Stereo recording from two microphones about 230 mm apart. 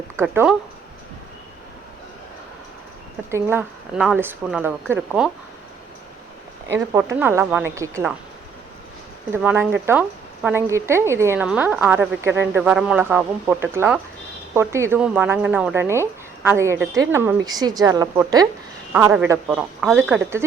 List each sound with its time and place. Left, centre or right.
0.2 s speech: centre
3.3 s speech: centre
6.7 s speech: centre
9.3 s speech: centre